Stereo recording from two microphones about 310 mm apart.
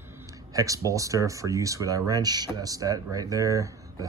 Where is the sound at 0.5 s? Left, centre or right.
Centre.